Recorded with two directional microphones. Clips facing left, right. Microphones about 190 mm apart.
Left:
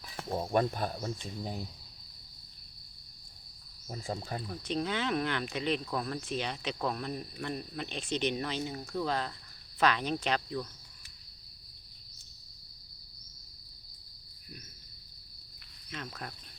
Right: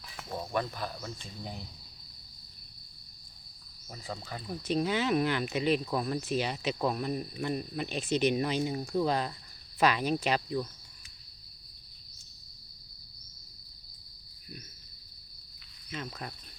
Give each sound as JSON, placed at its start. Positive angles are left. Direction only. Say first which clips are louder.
{"t": 0.0, "sound": "cricket", "louder": "left 4 dB", "side_deg": 35}
{"t": 0.8, "sound": "speech", "louder": "left 3 dB", "side_deg": 45}
{"t": 3.8, "sound": "cricket", "louder": "left 3 dB", "side_deg": 35}
{"t": 4.4, "sound": "speech", "louder": "right 5 dB", "side_deg": -5}
{"t": 15.9, "sound": "cricket", "louder": "right 2 dB", "side_deg": -5}